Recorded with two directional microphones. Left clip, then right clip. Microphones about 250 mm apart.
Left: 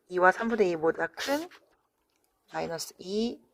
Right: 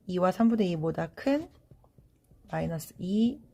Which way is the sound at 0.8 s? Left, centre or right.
Left.